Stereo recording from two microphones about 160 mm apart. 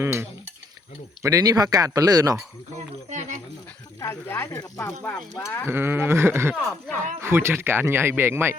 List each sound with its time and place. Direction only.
0.0 s speech: 15° right (ahead or behind)
3.1 s a sound: 45° right (ahead or behind)
4.0 s speech: 15° left (ahead or behind)
5.6 s speech: 15° right (ahead or behind)